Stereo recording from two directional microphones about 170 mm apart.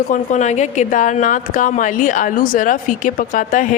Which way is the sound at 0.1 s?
45° left (ahead or behind).